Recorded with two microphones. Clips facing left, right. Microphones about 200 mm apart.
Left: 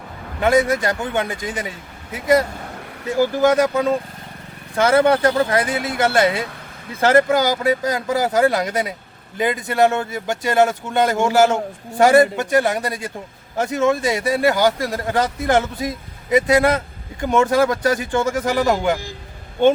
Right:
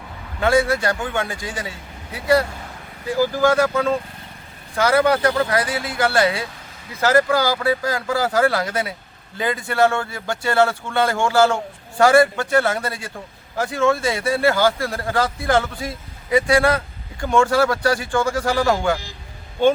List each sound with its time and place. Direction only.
0.4 s speech: 20° left (ahead or behind)